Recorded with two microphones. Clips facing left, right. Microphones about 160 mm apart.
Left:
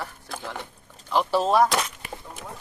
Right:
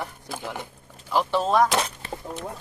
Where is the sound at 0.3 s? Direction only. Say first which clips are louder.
Right 2 dB; 10° right (ahead or behind).